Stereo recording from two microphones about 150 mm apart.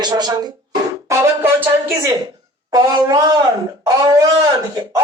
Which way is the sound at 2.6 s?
25° right (ahead or behind).